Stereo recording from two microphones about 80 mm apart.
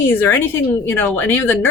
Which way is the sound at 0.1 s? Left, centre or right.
Left.